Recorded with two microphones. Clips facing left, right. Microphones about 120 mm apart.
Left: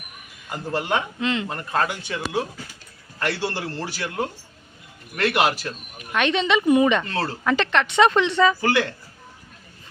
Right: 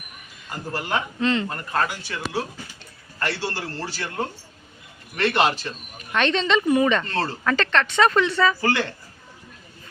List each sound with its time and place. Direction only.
0.4 s speech: 15° left (ahead or behind)
1.2 s speech: 10° left (ahead or behind)
1.9 s speech: 15° left (ahead or behind)